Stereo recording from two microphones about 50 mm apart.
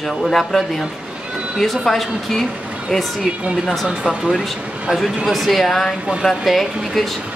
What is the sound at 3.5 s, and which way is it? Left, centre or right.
Speech, centre.